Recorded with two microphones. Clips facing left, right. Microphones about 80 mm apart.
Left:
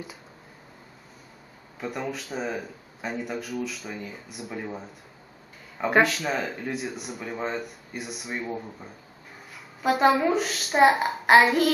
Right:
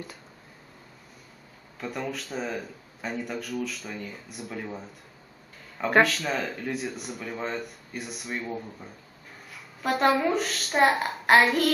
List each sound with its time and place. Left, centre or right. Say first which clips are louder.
1.8 s speech: left 1 dB; centre